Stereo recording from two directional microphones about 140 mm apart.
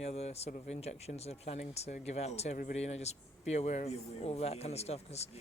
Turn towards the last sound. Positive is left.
turn(degrees=50)  # may be behind; listen again after turning